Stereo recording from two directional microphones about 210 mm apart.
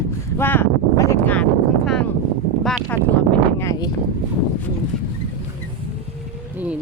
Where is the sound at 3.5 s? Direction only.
15° left (ahead or behind).